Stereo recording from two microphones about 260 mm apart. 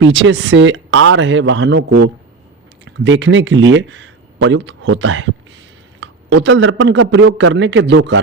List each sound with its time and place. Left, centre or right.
0.1 s speech: right